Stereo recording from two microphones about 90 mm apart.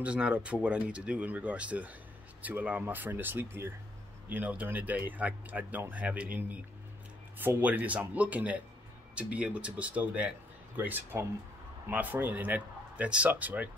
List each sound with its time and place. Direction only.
0.0 s a man's voice: 15° right (ahead or behind)